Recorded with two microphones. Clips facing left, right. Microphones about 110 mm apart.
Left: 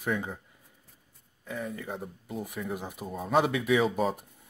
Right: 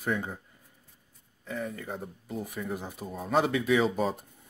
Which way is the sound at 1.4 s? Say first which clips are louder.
Right 1 dB; 5° left (ahead or behind).